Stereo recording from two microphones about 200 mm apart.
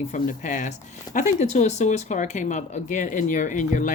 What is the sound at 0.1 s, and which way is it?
Speech, 40° left (ahead or behind).